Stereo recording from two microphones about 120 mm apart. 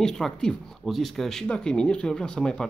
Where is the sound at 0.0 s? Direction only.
5° left (ahead or behind).